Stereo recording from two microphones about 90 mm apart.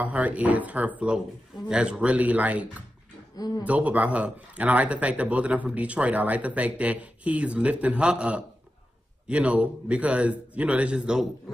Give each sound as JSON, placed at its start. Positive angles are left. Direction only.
{"t": 0.0, "sound": "speech", "side_deg": -15}
{"t": 3.3, "sound": "speech", "side_deg": 45}
{"t": 3.6, "sound": "speech", "side_deg": -15}